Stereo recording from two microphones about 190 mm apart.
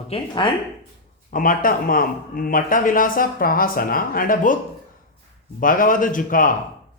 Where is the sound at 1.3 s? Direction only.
45° left (ahead or behind).